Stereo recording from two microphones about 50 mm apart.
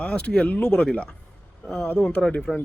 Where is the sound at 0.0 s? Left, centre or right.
Left.